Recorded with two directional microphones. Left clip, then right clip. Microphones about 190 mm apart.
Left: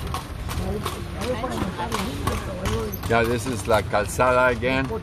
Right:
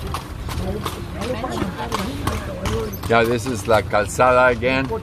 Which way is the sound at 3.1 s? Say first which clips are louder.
Right 4 dB; 20° right (ahead or behind).